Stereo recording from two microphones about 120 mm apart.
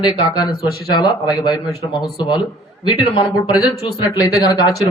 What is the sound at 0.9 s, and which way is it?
Speech, 35° left (ahead or behind).